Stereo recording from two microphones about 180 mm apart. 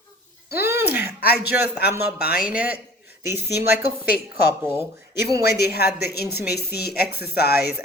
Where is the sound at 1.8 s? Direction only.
60° left (ahead or behind).